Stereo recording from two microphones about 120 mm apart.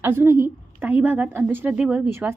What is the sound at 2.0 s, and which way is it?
Speech, 20° right (ahead or behind).